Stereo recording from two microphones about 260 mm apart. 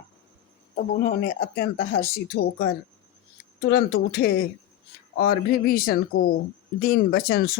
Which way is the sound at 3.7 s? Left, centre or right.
Left.